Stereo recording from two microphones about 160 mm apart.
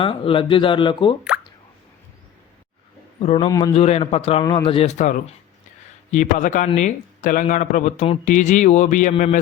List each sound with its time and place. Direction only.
0.0 s a man's voice: 35° left (ahead or behind)
3.3 s a man's voice: 25° left (ahead or behind); by 9.4 s 50° left (ahead or behind)